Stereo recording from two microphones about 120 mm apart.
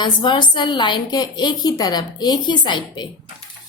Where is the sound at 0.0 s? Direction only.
40° left (ahead or behind).